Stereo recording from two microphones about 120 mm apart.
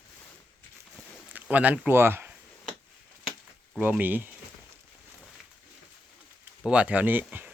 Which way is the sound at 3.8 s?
15° right (ahead or behind).